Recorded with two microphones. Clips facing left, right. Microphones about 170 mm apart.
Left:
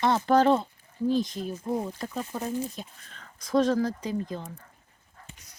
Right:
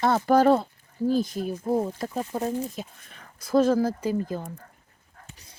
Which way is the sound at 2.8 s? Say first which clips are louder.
Right 4 dB; 10° right (ahead or behind).